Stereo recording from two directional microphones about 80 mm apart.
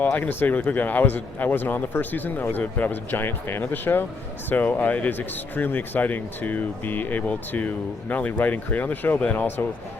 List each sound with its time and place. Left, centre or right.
0.0 s speech: left